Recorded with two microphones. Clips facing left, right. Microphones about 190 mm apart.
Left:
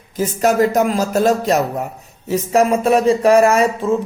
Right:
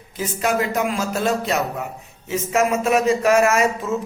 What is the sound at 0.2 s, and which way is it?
A man's voice, 40° left (ahead or behind).